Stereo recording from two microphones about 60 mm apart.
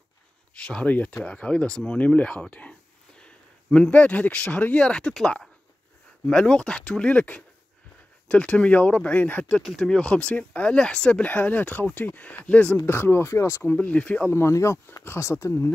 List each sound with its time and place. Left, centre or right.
0.6 s speech: centre
6.2 s speech: centre
12.8 s speech: left
13.7 s speech: left
14.3 s speech: left